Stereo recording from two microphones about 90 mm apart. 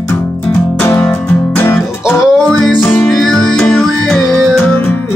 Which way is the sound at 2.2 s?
5° left (ahead or behind).